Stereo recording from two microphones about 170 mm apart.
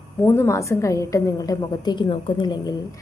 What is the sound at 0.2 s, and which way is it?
A woman's voice, 15° left (ahead or behind).